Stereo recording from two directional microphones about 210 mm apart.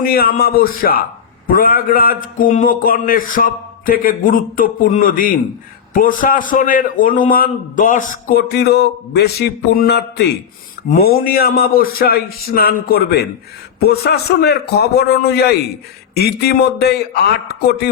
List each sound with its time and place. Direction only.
0.0 s a man's voice: 45° left (ahead or behind)